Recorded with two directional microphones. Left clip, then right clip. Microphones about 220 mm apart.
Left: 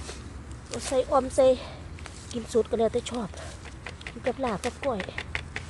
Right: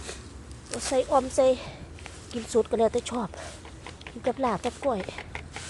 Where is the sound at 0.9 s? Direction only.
10° right (ahead or behind).